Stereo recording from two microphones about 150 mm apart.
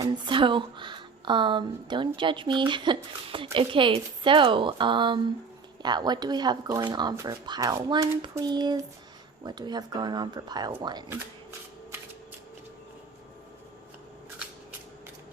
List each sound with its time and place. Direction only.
0.0 s speech: 35° right (ahead or behind)